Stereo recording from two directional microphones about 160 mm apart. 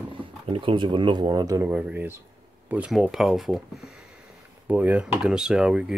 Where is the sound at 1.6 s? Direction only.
10° right (ahead or behind).